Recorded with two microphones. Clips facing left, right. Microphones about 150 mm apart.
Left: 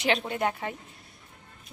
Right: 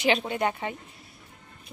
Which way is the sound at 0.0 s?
Centre (ahead or behind).